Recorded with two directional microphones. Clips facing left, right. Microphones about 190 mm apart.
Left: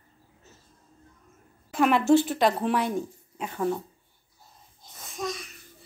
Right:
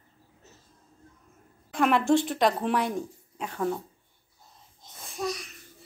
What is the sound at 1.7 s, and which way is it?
Speech, 5° left (ahead or behind).